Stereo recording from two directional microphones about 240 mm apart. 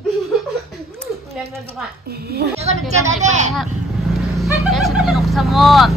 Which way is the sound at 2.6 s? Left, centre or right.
Right.